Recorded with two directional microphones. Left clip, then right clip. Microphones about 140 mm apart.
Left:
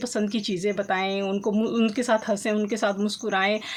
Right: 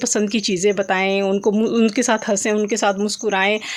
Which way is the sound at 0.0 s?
50° right (ahead or behind).